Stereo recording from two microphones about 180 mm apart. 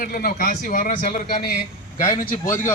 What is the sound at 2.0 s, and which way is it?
Speech, 15° left (ahead or behind).